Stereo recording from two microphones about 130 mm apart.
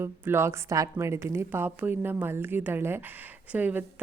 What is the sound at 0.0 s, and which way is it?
A woman's voice, 20° right (ahead or behind).